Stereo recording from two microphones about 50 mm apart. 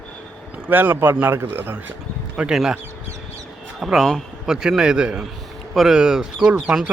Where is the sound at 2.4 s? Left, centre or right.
Centre.